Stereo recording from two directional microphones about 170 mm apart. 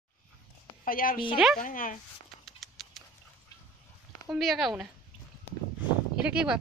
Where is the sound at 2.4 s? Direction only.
Centre (ahead or behind).